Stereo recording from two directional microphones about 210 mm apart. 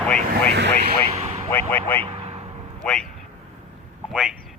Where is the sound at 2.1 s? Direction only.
30° right (ahead or behind).